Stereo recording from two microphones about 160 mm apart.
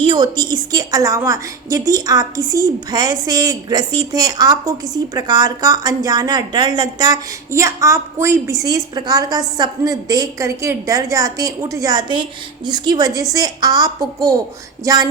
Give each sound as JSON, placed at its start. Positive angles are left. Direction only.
{"t": 0.0, "sound": "a woman's voice", "side_deg": -30}